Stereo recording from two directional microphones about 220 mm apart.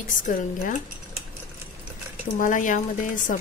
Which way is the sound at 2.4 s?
35° left (ahead or behind).